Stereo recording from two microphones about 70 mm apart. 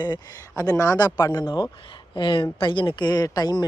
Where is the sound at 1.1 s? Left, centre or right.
Left.